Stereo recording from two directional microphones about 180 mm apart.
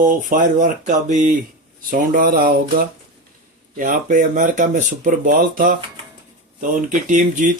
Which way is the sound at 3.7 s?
45° right (ahead or behind).